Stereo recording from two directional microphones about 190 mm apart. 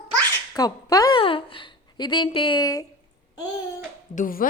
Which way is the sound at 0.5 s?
20° left (ahead or behind).